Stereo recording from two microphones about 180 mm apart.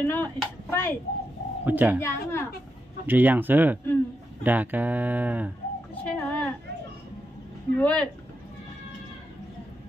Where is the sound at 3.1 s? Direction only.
10° right (ahead or behind).